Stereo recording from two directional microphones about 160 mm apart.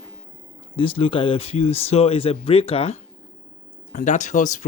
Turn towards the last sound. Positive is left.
turn(degrees=50)  # may be behind; listen again after turning